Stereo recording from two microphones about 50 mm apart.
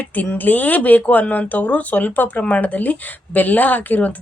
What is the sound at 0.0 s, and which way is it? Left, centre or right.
Speech, left.